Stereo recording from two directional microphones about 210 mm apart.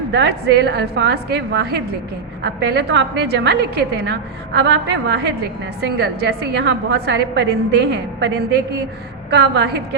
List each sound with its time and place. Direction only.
0.1 s a woman's voice: 55° right (ahead or behind)